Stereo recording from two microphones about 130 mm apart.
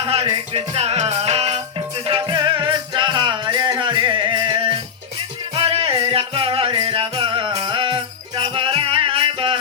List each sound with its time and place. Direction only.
0.1 s music: 45° right (ahead or behind)
2.0 s music: 35° right (ahead or behind)